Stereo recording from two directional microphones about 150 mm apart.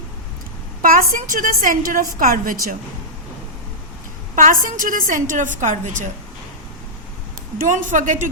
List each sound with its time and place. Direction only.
0.8 s a woman's voice: 70° right (ahead or behind)
4.4 s a woman's voice: 65° right (ahead or behind)
7.6 s a woman's voice: 60° right (ahead or behind)